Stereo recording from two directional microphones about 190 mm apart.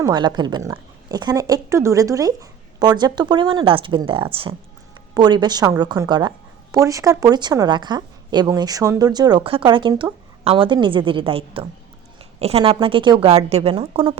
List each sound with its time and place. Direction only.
0.0 s a woman's voice: 20° right (ahead or behind)